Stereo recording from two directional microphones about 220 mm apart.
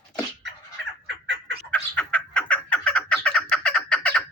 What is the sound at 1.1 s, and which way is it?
Fowl, 55° right (ahead or behind).